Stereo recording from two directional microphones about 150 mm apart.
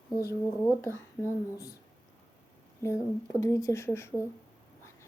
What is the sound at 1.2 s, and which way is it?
Speech, 5° left (ahead or behind).